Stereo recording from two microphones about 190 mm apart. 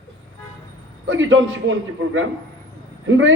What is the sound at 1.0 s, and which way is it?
Speech, 80° right.